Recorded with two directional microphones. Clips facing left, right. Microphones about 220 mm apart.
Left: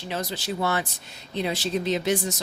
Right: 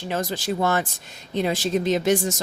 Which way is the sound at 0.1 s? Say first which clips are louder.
Right 4 dB; 50° right (ahead or behind).